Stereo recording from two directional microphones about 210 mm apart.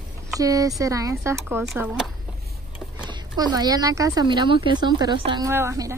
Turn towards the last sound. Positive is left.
turn(degrees=-15)  # may be behind; listen again after turning